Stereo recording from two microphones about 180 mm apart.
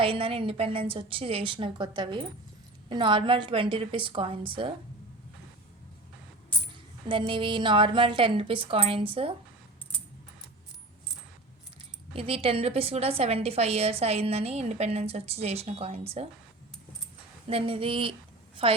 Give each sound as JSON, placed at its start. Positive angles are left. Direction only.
{"t": 0.0, "sound": "a woman's voice", "side_deg": -30}
{"t": 7.1, "sound": "a woman's voice", "side_deg": -30}
{"t": 12.1, "sound": "a woman's voice", "side_deg": -30}
{"t": 17.5, "sound": "a woman's voice", "side_deg": -30}